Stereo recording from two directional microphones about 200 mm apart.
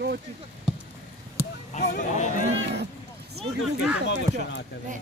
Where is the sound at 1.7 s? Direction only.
35° left (ahead or behind).